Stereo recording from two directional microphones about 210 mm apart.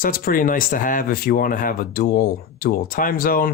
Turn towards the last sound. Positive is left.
turn(degrees=45)  # may be behind; listen again after turning